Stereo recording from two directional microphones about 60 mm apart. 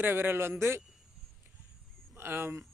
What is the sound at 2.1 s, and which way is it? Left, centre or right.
Speech, right.